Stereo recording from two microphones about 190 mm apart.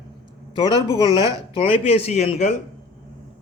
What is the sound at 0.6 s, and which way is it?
Speech, 20° right (ahead or behind).